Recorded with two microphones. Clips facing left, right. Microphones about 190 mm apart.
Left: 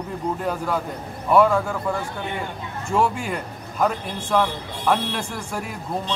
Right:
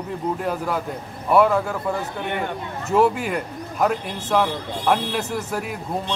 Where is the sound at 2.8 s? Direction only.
5° right (ahead or behind).